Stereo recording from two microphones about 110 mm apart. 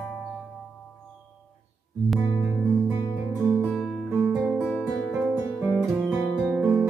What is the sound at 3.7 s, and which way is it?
Music, 5° right (ahead or behind).